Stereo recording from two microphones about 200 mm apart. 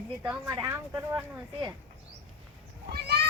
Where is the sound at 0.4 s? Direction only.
15° right (ahead or behind).